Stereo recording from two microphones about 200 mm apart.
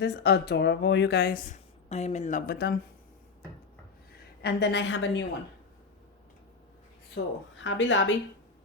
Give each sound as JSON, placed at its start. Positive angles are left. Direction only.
{"t": 0.0, "sound": "speech", "side_deg": 55}
{"t": 4.4, "sound": "speech", "side_deg": 60}
{"t": 7.5, "sound": "speech", "side_deg": 70}